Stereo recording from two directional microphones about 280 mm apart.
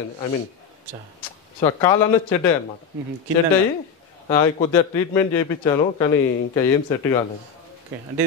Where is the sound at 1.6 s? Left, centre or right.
Centre.